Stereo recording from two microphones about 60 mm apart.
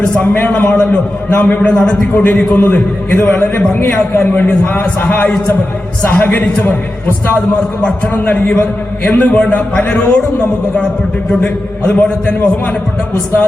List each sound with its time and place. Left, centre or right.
0.2 s a man's voice: left
1.6 s a man's voice: centre
2.1 s a man's voice: left
4.4 s a man's voice: left
8.2 s a man's voice: left
11.4 s a man's voice: left